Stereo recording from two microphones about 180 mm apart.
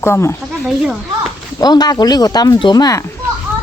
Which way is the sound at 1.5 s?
20° left (ahead or behind).